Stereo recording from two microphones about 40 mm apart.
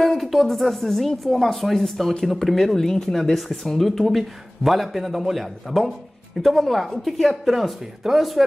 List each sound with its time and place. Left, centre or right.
0.2 s speech: centre